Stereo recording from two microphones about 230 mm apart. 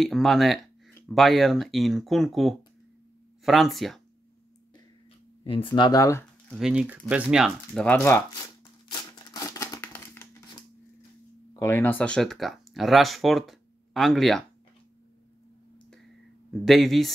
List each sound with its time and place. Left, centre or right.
0.0 s speech: centre
5.4 s speech: left
6.5 s speech: centre
8.9 s a sound: centre
11.5 s speech: centre
16.6 s speech: centre